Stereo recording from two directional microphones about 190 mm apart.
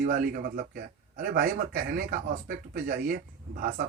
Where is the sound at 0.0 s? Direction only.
50° right (ahead or behind).